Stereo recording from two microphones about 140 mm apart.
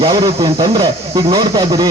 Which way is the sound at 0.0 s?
30° right (ahead or behind).